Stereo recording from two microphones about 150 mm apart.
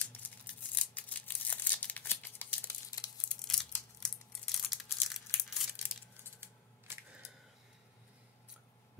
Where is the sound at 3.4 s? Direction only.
5° left (ahead or behind).